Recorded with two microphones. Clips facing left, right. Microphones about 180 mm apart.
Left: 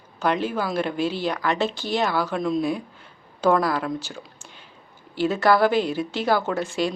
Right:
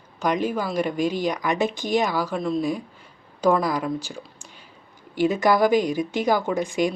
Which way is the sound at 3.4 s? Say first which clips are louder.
Even; 10° right (ahead or behind).